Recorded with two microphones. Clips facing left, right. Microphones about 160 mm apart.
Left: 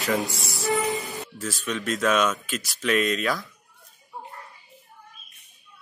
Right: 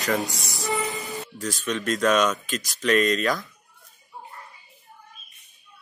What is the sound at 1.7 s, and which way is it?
Speech, 5° left (ahead or behind).